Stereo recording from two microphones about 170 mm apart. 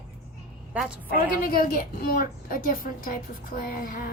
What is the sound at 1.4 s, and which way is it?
A woman's voice, 60° left (ahead or behind).